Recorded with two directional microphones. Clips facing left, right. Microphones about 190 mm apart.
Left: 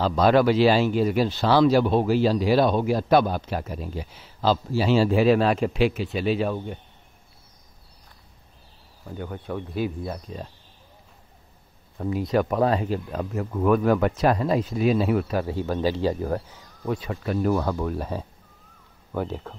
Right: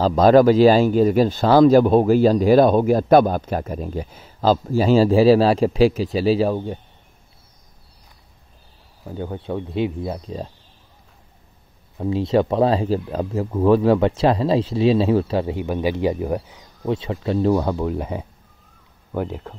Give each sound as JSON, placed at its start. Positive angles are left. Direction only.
{"t": 0.0, "sound": "speech", "side_deg": -40}
{"t": 9.1, "sound": "speech", "side_deg": -25}
{"t": 12.0, "sound": "speech", "side_deg": -25}